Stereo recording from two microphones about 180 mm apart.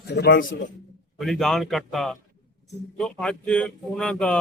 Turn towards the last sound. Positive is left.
turn(degrees=5)  # may be behind; listen again after turning